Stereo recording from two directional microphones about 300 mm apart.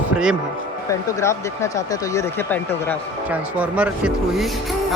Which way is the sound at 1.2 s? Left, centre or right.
Centre.